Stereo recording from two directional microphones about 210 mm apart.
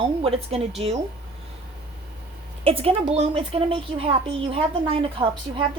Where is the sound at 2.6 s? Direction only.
25° right (ahead or behind).